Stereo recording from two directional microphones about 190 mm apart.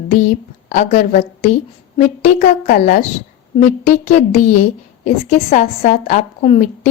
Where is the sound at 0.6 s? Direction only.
40° left (ahead or behind).